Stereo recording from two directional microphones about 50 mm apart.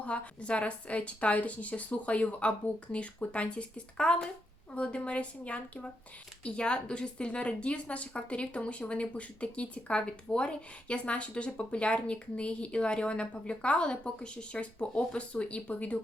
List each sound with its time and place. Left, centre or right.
0.0 s a woman's voice: left